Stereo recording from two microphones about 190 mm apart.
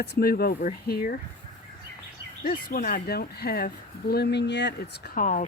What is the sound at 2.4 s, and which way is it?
Speech, 50° left (ahead or behind).